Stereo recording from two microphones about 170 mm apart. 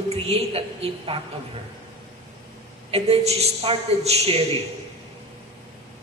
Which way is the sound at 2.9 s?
40° right (ahead or behind).